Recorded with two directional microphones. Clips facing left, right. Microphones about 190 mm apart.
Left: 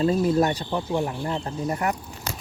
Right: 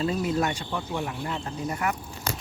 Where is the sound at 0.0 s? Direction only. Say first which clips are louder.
Left 5 dB; 35° left (ahead or behind).